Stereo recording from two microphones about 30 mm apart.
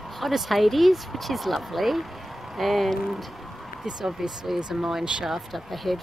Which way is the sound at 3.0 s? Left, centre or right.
Centre.